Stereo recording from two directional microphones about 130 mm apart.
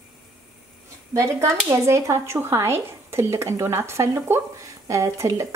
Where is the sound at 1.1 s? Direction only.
25° right (ahead or behind).